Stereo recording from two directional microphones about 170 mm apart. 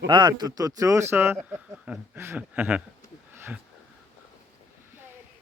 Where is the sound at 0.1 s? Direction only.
25° right (ahead or behind); by 2.8 s 10° right (ahead or behind).